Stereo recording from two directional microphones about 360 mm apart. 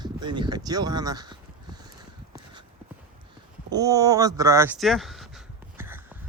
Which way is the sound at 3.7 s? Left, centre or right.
Centre.